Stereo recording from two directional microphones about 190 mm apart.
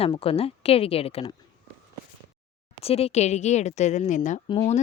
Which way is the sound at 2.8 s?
30° left (ahead or behind).